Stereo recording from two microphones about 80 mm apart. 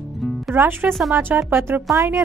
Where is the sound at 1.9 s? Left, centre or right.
Right.